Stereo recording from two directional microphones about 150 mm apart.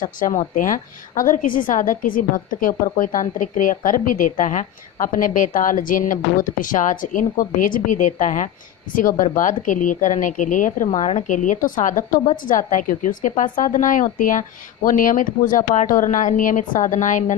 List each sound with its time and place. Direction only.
0.0 s a woman's voice: 60° left (ahead or behind)